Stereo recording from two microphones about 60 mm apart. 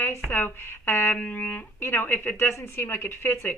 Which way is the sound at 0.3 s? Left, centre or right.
Left.